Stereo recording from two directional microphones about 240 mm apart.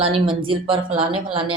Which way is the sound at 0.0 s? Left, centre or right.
Right.